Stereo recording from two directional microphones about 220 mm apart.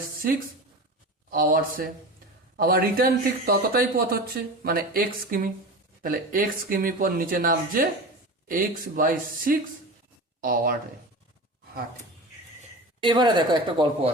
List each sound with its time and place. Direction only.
1.3 s a man's voice: 40° right (ahead or behind)
13.0 s speech: 20° right (ahead or behind)